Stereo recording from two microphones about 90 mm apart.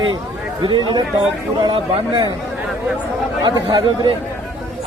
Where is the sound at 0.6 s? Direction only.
65° right (ahead or behind).